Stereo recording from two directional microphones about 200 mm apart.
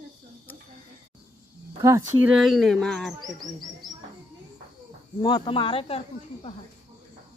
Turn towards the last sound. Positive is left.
turn(degrees=30)  # may be behind; listen again after turning